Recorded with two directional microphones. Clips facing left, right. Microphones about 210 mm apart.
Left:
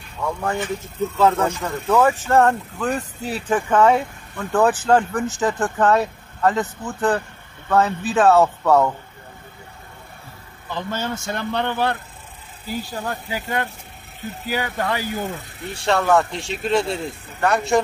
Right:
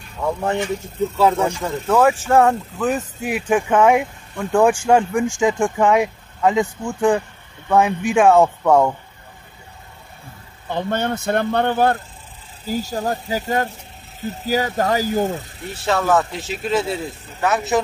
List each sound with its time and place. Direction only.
0.2 s speech: 20° right (ahead or behind)
1.1 s speech: 10° right (ahead or behind)
10.7 s speech: 60° right (ahead or behind); by 15.3 s 40° right (ahead or behind)
15.7 s a man's voice: centre (ahead or behind)